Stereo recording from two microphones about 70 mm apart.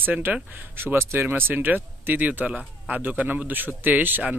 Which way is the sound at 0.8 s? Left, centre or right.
Right.